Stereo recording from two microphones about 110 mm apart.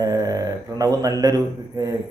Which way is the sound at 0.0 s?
30° right (ahead or behind).